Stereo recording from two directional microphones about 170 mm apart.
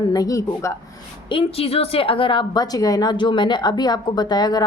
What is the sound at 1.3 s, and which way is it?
A woman's voice, 35° left (ahead or behind).